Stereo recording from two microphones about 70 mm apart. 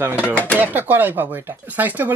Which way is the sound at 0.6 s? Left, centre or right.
Right.